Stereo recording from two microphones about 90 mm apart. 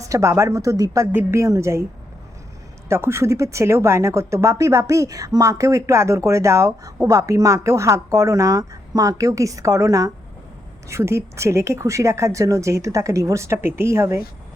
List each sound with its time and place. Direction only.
0.0 s speech: 35° right (ahead or behind)
2.9 s speech: 30° right (ahead or behind)